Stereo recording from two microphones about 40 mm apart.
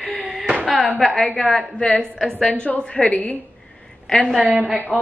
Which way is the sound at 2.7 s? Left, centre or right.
Left.